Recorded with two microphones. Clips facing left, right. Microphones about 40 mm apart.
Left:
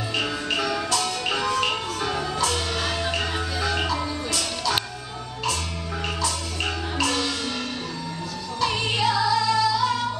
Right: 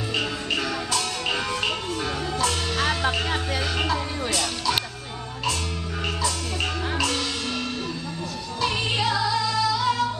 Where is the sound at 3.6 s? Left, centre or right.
Centre.